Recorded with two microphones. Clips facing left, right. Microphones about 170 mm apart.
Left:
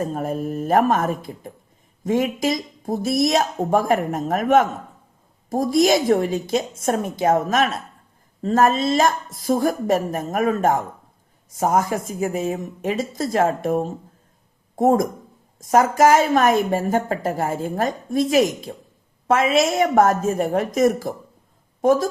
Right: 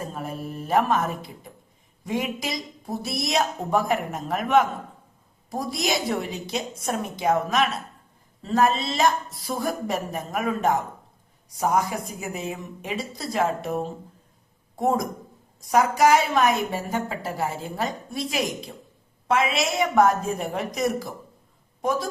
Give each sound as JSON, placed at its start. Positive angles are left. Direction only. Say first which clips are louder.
{"t": 0.0, "sound": "a woman's voice", "louder": "left 8 dB", "side_deg": 45}